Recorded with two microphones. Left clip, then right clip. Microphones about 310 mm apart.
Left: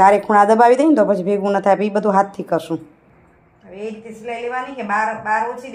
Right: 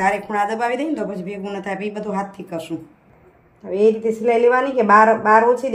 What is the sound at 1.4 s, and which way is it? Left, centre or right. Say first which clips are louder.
Speech: left 12 dB; left.